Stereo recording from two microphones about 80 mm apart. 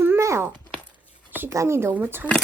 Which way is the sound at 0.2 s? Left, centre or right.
Right.